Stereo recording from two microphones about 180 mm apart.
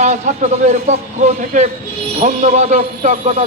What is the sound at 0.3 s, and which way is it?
A man's voice, 45° right (ahead or behind).